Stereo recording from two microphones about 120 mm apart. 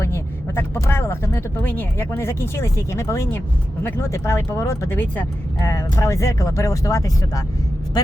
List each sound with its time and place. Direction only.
0.0 s speech: 20° left (ahead or behind)